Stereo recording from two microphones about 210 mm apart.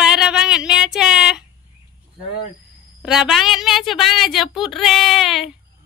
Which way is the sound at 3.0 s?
Centre (ahead or behind).